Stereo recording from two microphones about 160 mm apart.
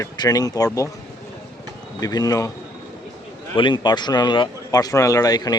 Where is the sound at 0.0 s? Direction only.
25° left (ahead or behind).